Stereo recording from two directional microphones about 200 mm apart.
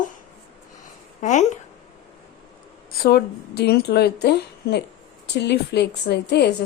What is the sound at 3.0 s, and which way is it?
A woman's voice, 50° left (ahead or behind).